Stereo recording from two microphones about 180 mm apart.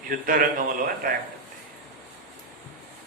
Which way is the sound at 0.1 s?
50° right (ahead or behind).